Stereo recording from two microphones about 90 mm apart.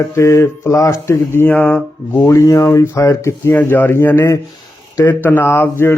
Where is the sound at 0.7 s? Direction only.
35° left (ahead or behind).